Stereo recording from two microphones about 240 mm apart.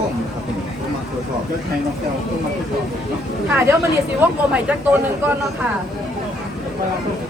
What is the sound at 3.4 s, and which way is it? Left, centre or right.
Speech, centre.